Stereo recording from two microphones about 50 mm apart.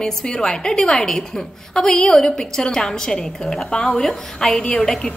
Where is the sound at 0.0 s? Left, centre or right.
Centre.